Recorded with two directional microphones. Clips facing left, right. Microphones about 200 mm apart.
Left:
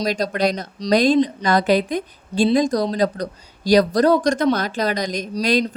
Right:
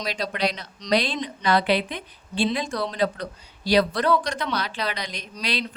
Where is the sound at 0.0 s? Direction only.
45° left (ahead or behind).